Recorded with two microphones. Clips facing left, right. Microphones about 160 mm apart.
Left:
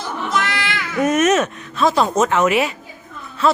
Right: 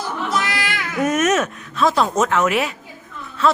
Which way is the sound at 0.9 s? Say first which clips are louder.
Left 2 dB; centre (ahead or behind).